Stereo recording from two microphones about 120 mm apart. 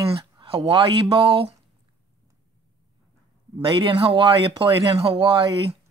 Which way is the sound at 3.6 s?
45° right (ahead or behind).